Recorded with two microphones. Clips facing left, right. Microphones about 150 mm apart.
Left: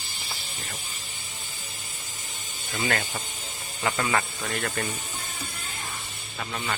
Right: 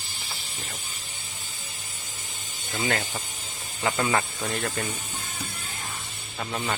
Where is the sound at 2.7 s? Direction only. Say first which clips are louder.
Even; 15° right (ahead or behind).